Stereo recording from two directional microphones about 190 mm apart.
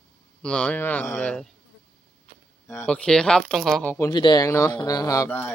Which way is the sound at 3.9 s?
20° left (ahead or behind).